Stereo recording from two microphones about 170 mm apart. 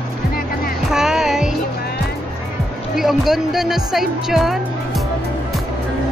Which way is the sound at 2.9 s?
Centre (ahead or behind).